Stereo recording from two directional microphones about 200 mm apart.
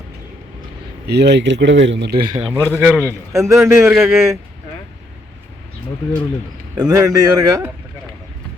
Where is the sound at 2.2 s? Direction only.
25° right (ahead or behind).